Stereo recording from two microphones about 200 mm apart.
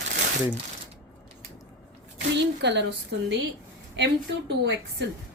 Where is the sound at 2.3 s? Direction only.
60° right (ahead or behind).